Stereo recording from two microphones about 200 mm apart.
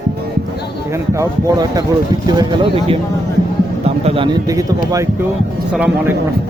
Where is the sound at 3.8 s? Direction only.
30° right (ahead or behind).